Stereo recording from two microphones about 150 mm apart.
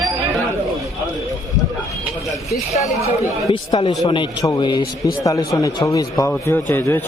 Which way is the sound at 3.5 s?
35° left (ahead or behind).